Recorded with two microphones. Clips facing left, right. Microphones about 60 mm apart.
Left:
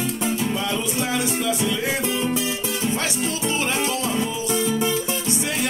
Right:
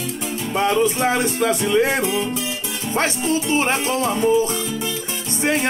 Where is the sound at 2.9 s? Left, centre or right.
Right.